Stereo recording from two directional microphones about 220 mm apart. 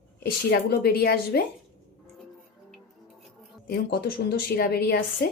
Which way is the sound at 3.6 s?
45° left (ahead or behind).